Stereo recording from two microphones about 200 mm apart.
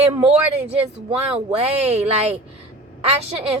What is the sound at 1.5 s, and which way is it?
Speech, 30° right (ahead or behind).